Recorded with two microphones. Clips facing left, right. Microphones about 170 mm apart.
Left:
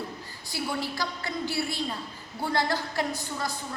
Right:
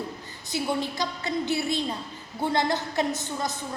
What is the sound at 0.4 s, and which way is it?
A woman's voice, 20° right (ahead or behind).